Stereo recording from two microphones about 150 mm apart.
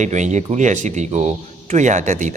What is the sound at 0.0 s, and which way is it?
A man's voice, 50° right (ahead or behind).